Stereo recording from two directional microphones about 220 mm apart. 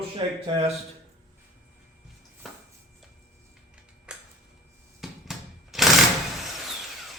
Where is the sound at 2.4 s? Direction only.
Centre (ahead or behind).